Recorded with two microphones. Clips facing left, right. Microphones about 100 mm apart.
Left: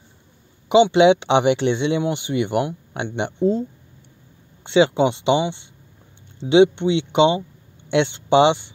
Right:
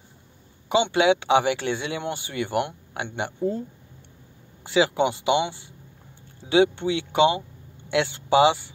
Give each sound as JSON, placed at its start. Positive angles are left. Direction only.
{"t": 0.9, "sound": "speech", "side_deg": 25}
{"t": 4.6, "sound": "speech", "side_deg": 25}